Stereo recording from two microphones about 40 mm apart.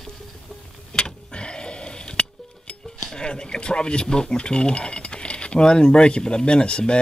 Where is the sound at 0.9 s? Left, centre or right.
Left.